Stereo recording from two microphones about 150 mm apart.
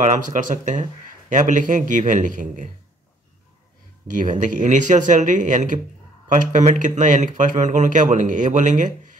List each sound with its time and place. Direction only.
0.0 s speech: 55° right (ahead or behind)
4.1 s speech: 60° right (ahead or behind)